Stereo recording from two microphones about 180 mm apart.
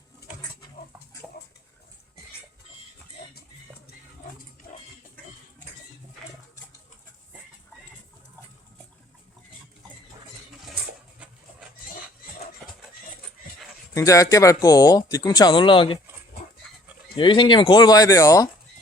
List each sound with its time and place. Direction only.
13.9 s speech: 15° left (ahead or behind)
17.2 s speech: 25° left (ahead or behind)